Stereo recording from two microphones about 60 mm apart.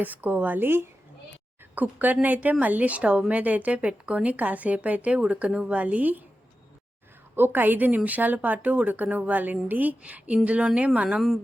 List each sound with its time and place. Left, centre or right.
0.0 s a woman's voice: right
7.3 s a woman's voice: right; by 11.2 s centre